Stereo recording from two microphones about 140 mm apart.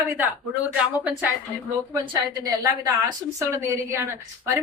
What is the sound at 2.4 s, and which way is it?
A woman's voice, 25° right (ahead or behind).